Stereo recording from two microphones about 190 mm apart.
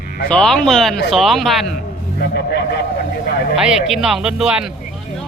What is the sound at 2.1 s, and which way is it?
Speech, 60° left (ahead or behind).